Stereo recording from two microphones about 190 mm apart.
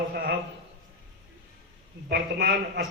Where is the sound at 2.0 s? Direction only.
55° right (ahead or behind).